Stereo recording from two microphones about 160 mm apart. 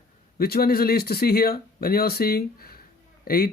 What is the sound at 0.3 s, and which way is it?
Speech, 75° left (ahead or behind).